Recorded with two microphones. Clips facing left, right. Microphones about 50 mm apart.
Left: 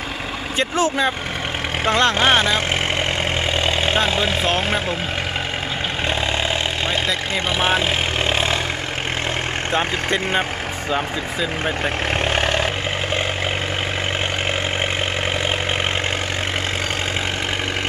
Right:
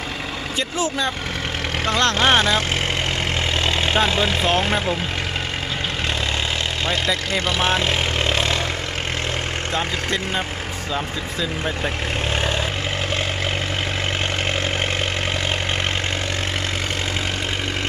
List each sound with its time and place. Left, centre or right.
1.8 s speech: centre
3.7 s speech: centre
7.3 s speech: centre
8.3 s vehicle: centre
9.7 s speech: left
12.2 s vehicle: left